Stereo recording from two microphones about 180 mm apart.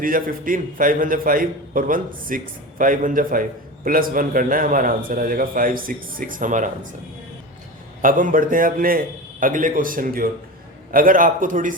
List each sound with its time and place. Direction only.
0.0 s a man's voice: 50° right (ahead or behind)
8.0 s a man's voice: 50° right (ahead or behind)